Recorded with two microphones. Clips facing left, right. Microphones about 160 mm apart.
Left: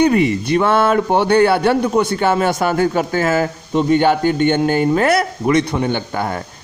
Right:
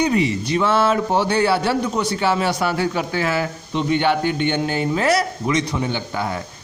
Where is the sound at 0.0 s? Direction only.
55° left (ahead or behind).